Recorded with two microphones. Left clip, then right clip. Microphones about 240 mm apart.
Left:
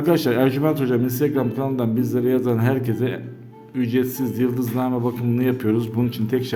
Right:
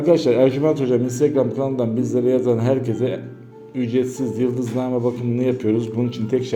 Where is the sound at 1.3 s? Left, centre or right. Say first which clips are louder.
Right 3 dB; left.